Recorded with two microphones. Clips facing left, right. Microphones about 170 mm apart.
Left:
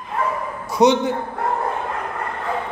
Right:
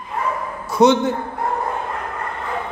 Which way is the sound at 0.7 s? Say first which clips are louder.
Right 1 dB; 15° left (ahead or behind).